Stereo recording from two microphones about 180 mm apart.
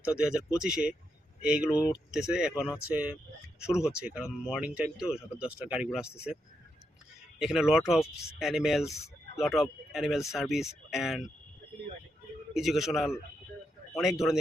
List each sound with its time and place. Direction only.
0.1 s speech: 5° right (ahead or behind)
1.7 s speech: 20° left (ahead or behind)
2.1 s speech: 5° right (ahead or behind)
7.3 s speech: 5° right (ahead or behind)
12.5 s speech: centre (ahead or behind)